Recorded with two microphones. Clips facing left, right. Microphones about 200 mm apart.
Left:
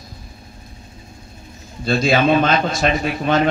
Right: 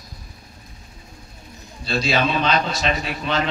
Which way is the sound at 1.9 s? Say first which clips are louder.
Left 6 dB; 50° left (ahead or behind).